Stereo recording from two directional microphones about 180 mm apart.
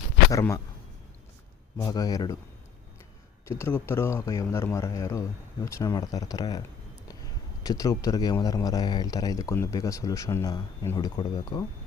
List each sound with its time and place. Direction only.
0.3 s a man's voice: 15° left (ahead or behind)
1.8 s speech: 20° left (ahead or behind)
3.4 s a man's voice: 15° left (ahead or behind)
7.6 s speech: 20° left (ahead or behind)